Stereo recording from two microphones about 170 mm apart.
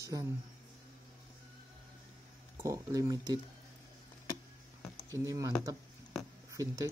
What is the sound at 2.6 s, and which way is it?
Speech, 20° right (ahead or behind).